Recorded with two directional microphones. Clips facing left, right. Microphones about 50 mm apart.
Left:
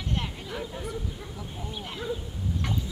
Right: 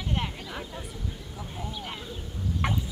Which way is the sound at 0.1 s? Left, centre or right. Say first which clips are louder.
Even; centre.